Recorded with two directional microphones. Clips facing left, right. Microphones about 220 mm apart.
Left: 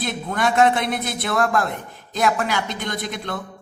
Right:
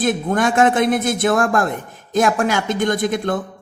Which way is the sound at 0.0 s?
50° right (ahead or behind).